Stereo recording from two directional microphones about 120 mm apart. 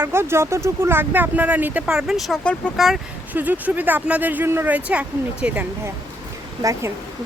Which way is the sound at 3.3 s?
15° right (ahead or behind).